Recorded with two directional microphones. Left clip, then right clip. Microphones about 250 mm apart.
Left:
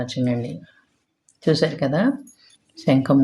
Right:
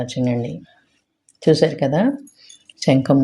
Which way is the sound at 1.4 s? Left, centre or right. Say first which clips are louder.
Right 5 dB; centre.